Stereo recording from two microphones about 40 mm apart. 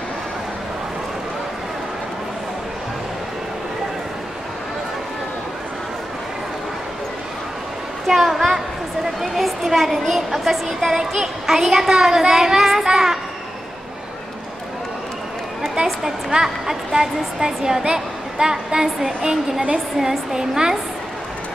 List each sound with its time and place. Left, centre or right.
8.1 s a sound: centre
9.2 s a woman's voice: centre
15.7 s a woman's voice: centre